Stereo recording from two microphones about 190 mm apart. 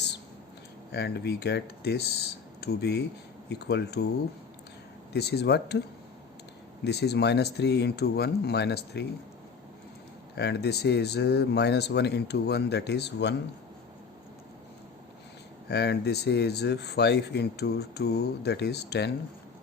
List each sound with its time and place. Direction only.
0.9 s speech: 60° left (ahead or behind)
5.1 s speech: 60° left (ahead or behind)
6.8 s speech: 60° left (ahead or behind)
10.3 s speech: 60° left (ahead or behind)
15.7 s speech: 60° left (ahead or behind)